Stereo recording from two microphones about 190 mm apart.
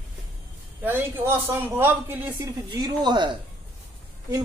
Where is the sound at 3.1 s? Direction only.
25° right (ahead or behind).